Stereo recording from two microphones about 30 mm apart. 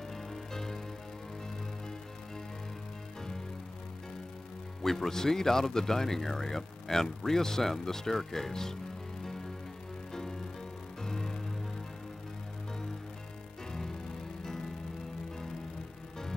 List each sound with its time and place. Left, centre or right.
0.1 s music: centre
4.8 s speech: centre
10.1 s music: centre
13.7 s music: centre